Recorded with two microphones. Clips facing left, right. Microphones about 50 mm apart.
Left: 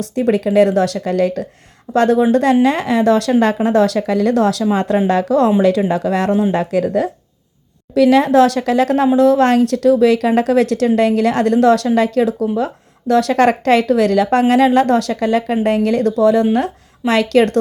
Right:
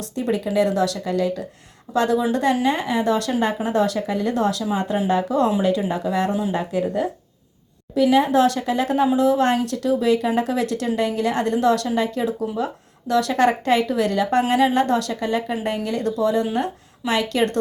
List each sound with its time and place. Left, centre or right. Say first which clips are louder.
0.2 s a woman's voice: left 8 dB; left